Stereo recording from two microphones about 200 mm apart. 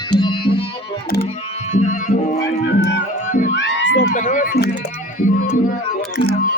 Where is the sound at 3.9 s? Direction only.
40° left (ahead or behind).